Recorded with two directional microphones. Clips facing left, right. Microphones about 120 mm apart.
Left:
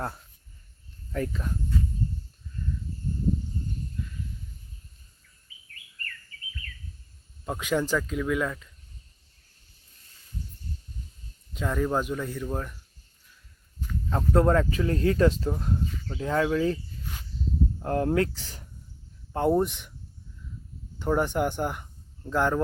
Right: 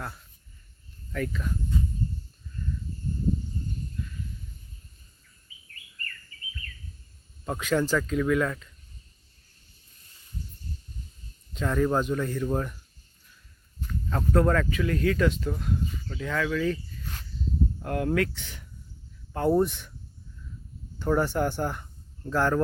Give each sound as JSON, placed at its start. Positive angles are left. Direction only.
{"t": 1.1, "sound": "speech", "side_deg": 30}
{"t": 7.4, "sound": "speech", "side_deg": 10}
{"t": 11.5, "sound": "speech", "side_deg": 5}
{"t": 14.1, "sound": "speech", "side_deg": 20}
{"t": 17.7, "sound": "speech", "side_deg": 30}
{"t": 19.3, "sound": "speech", "side_deg": 20}
{"t": 21.0, "sound": "speech", "side_deg": 15}